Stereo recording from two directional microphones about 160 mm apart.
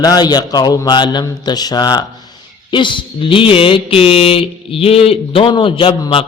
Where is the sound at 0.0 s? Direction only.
25° left (ahead or behind).